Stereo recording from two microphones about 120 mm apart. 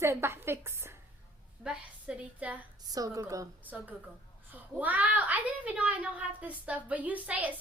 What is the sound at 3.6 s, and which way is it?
A woman's voice, 15° right (ahead or behind).